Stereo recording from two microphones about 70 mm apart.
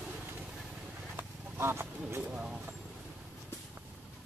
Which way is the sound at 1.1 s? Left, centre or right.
Right.